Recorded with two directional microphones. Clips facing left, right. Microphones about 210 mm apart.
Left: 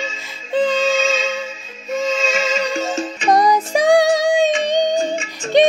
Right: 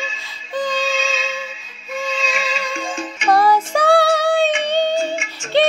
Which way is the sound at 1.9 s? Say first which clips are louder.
Left 5 dB; 45° left (ahead or behind).